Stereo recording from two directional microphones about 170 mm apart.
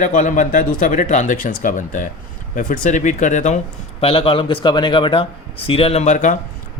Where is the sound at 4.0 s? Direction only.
35° left (ahead or behind).